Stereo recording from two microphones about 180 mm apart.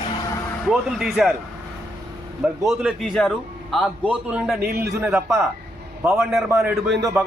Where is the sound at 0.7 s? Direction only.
Centre (ahead or behind).